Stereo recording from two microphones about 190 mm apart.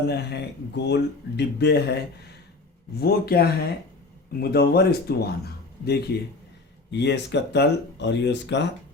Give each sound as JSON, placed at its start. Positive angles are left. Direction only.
{"t": 0.1, "sound": "speech", "side_deg": 60}